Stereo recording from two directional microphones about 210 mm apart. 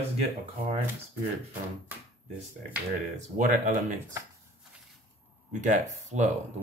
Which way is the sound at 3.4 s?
35° right (ahead or behind).